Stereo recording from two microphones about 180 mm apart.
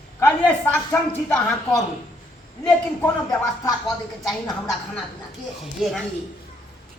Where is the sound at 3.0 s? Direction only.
20° left (ahead or behind).